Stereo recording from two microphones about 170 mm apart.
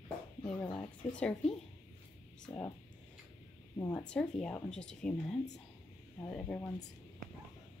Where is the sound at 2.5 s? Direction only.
25° left (ahead or behind).